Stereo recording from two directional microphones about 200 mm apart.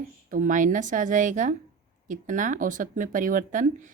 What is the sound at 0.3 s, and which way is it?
Speech, 40° right (ahead or behind).